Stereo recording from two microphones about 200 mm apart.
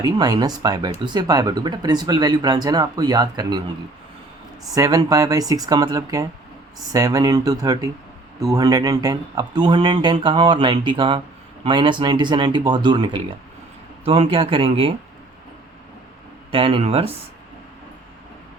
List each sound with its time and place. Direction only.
0.0 s speech: 20° right (ahead or behind)
4.7 s speech: 15° right (ahead or behind)
16.5 s speech: 25° right (ahead or behind)